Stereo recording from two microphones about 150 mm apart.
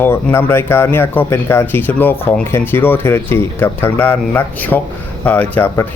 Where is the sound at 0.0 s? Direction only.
15° left (ahead or behind).